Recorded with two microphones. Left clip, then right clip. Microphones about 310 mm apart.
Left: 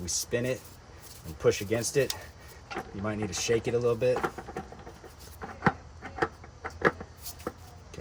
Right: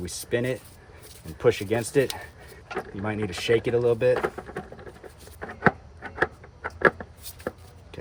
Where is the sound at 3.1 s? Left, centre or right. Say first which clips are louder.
Right 5 dB; centre.